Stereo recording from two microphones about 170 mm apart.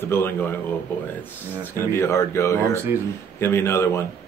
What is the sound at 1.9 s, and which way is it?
Speech, 15° left (ahead or behind).